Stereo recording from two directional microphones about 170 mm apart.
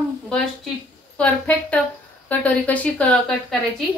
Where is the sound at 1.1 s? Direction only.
5° left (ahead or behind).